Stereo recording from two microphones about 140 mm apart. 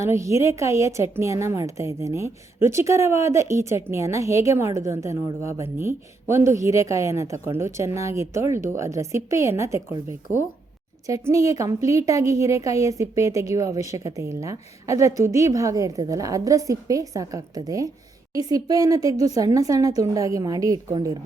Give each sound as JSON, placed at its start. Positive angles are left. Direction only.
{"t": 0.0, "sound": "a woman's voice", "side_deg": -20}